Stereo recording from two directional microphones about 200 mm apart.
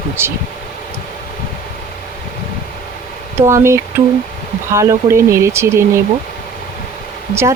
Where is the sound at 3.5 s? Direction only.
15° right (ahead or behind).